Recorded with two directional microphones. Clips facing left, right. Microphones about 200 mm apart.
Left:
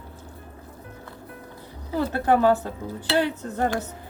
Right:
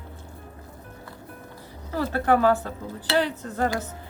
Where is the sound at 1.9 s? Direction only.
20° left (ahead or behind).